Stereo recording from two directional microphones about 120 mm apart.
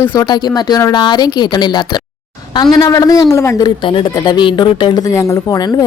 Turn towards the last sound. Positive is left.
turn(degrees=30)  # may be behind; listen again after turning